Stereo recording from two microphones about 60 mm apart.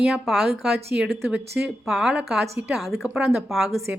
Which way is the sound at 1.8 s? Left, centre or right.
Centre.